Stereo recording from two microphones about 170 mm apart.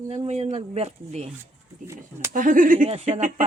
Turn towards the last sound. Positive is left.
turn(degrees=-45)  # may be behind; listen again after turning